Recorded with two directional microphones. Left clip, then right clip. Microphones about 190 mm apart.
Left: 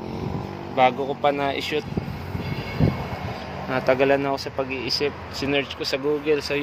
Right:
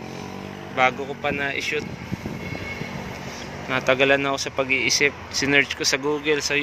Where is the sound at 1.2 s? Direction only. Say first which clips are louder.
Left 2 dB; 20° left (ahead or behind).